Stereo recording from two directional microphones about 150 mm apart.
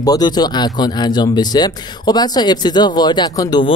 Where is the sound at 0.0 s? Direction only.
25° left (ahead or behind).